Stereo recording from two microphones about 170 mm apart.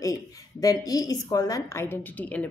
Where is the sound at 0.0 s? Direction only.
20° left (ahead or behind).